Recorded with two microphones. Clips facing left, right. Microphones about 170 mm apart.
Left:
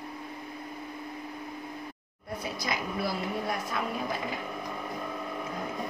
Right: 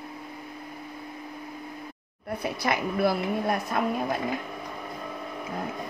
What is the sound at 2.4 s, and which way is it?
A woman's voice, 60° right (ahead or behind).